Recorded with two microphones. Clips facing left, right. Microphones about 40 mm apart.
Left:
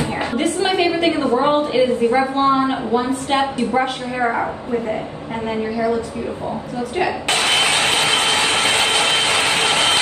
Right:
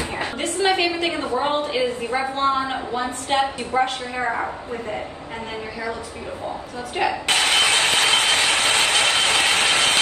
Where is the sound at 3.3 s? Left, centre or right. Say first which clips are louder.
Left 2 dB; left.